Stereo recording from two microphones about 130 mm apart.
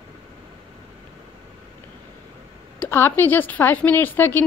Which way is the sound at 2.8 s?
20° left (ahead or behind).